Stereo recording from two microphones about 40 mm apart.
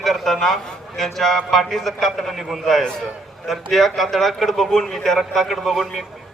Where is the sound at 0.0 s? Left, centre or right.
Centre.